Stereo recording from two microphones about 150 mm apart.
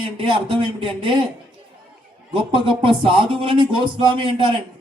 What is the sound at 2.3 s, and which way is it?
Speech, 35° right (ahead or behind).